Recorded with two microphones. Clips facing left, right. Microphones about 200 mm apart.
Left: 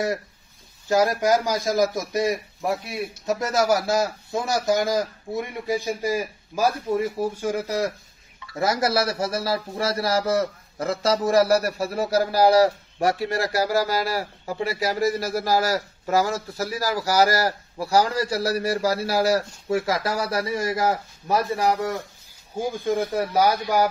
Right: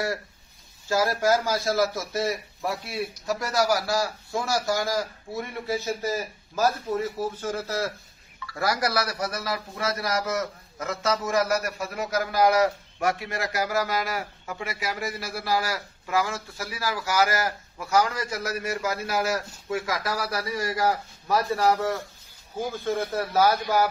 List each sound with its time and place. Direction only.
0.8 s a man's voice: 20° left (ahead or behind)